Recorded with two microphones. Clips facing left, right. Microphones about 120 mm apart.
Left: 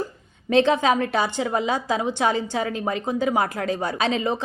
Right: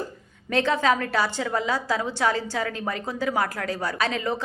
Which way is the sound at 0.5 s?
20° left (ahead or behind).